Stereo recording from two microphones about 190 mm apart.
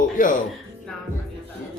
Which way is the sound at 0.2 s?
45° left (ahead or behind).